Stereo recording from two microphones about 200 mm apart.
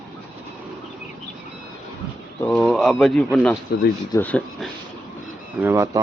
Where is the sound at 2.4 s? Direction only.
5° left (ahead or behind).